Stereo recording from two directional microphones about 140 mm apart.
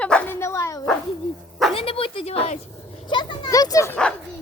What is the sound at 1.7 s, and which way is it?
Speech, 40° left (ahead or behind).